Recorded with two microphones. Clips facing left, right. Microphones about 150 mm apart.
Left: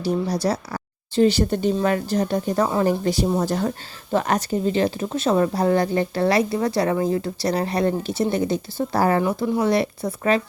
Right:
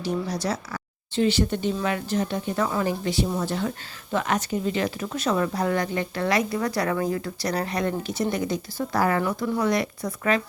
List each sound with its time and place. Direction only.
0.4 s speech: 35° left (ahead or behind)